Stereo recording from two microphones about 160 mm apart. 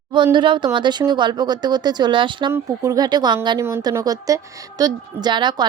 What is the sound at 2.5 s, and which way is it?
Speech, 20° right (ahead or behind).